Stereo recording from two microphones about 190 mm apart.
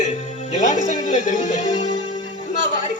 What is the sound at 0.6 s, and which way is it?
Speech, 40° left (ahead or behind).